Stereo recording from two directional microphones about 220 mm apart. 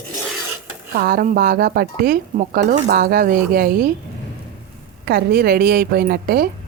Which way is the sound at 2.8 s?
45° right (ahead or behind).